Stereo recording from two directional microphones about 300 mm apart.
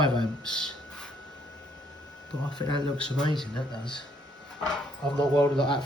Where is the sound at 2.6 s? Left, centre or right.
Centre.